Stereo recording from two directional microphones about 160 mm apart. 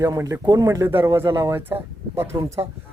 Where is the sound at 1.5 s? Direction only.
15° right (ahead or behind).